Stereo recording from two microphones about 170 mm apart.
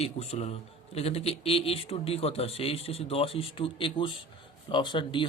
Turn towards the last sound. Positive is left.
turn(degrees=30)  # may be behind; listen again after turning